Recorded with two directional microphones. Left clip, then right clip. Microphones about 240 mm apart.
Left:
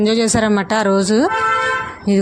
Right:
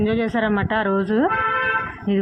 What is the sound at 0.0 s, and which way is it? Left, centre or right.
A woman's voice, left.